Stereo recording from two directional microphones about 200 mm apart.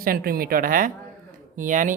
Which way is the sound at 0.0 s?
45° right (ahead or behind).